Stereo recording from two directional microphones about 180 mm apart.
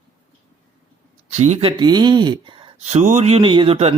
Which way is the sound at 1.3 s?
35° right (ahead or behind).